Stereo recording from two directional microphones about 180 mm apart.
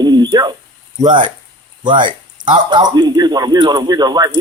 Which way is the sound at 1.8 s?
25° right (ahead or behind).